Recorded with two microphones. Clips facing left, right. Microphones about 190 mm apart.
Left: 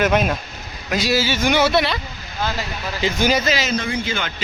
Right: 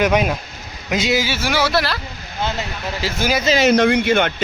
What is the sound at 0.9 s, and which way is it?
A man's voice, 20° right (ahead or behind).